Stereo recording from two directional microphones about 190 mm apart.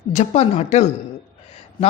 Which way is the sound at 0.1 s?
35° left (ahead or behind).